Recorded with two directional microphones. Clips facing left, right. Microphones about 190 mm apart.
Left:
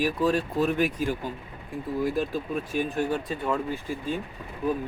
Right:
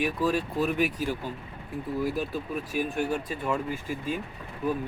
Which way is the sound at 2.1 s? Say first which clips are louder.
Left 3 dB; 5° right (ahead or behind).